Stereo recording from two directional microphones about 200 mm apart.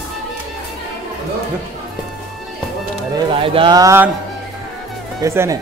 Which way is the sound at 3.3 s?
25° right (ahead or behind).